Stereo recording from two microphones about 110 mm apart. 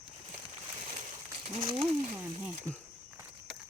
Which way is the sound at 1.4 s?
60° right (ahead or behind).